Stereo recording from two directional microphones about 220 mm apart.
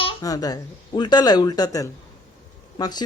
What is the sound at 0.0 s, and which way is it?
Speech, 20° left (ahead or behind).